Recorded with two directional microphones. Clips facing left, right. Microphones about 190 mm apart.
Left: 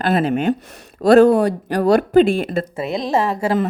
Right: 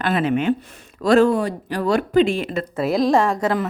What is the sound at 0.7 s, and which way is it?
Speech, 70° left (ahead or behind).